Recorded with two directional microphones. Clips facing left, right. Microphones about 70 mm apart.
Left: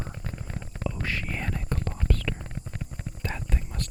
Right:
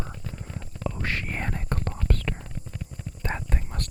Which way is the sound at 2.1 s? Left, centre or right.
Right.